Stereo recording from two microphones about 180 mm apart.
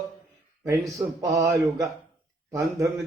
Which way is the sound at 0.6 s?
20° right (ahead or behind).